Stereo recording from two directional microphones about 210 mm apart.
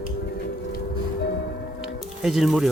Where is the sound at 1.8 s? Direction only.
Centre (ahead or behind).